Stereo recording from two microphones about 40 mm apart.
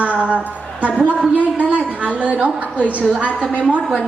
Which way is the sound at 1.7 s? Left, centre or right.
Right.